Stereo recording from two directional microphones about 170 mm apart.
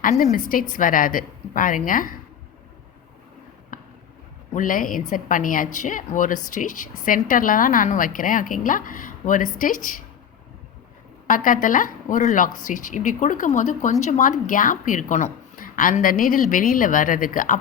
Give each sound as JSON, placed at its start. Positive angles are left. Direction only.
{"t": 0.0, "sound": "a woman's voice", "side_deg": 55}
{"t": 3.7, "sound": "a sound", "side_deg": 50}
{"t": 4.5, "sound": "a woman's voice", "side_deg": 55}
{"t": 11.3, "sound": "a woman's voice", "side_deg": 50}